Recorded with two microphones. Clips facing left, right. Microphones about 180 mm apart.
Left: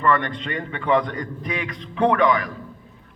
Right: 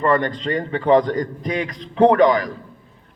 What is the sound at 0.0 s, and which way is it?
A man's voice, 35° right (ahead or behind).